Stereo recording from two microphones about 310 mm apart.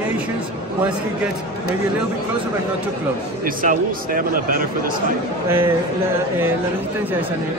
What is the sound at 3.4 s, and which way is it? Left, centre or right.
Speech, right.